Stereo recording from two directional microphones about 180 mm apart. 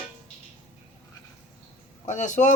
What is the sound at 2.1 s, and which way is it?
Speech, 40° left (ahead or behind).